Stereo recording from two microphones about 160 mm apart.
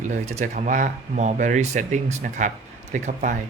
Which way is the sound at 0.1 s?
45° right (ahead or behind).